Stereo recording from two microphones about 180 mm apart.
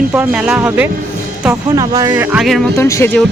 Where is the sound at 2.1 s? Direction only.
10° right (ahead or behind).